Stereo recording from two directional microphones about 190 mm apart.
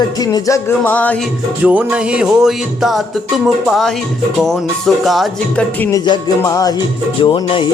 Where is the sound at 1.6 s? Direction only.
10° right (ahead or behind).